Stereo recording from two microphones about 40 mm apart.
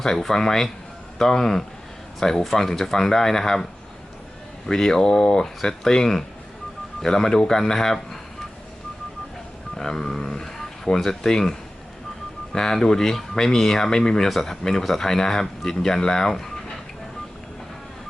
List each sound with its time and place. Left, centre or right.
0.0 s speech: centre
4.7 s speech: centre
9.7 s speech: centre
12.5 s speech: centre